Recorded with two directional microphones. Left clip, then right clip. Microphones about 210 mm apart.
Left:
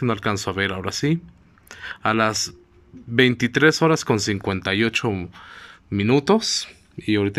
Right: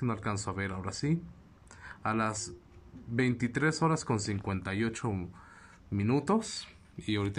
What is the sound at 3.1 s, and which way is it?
Speech, 45° left (ahead or behind).